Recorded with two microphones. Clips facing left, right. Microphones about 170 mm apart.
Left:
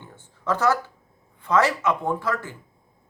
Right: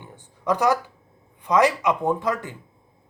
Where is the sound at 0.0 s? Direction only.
15° right (ahead or behind).